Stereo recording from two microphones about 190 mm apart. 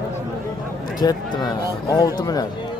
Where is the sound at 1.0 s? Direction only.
20° left (ahead or behind).